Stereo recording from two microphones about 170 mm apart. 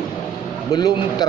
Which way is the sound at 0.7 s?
25° left (ahead or behind).